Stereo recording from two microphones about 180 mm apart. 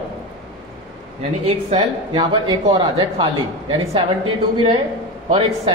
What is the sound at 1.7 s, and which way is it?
A woman's voice, 25° right (ahead or behind).